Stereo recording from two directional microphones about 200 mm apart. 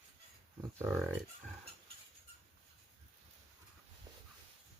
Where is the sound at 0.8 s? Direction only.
15° right (ahead or behind).